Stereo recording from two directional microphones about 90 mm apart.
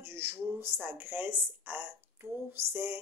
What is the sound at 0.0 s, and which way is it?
Speech, 25° right (ahead or behind).